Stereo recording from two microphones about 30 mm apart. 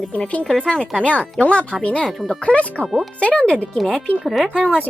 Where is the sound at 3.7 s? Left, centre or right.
Centre.